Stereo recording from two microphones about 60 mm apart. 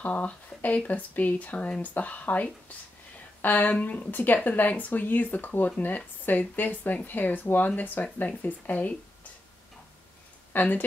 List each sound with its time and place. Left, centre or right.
0.0 s speech: left
10.5 s speech: left